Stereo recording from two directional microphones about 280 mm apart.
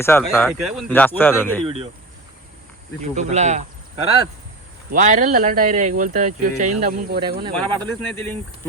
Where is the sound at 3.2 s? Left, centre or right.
Right.